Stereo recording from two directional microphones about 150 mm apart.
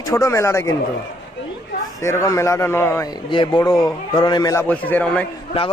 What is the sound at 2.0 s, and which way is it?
Speech, 20° left (ahead or behind).